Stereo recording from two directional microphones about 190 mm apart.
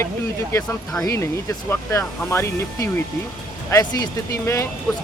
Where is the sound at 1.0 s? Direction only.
15° left (ahead or behind).